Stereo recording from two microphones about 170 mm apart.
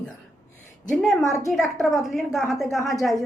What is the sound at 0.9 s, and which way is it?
A woman's voice, centre (ahead or behind).